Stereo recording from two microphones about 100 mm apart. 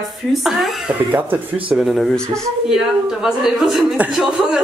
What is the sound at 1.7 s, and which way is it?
Speech, centre (ahead or behind).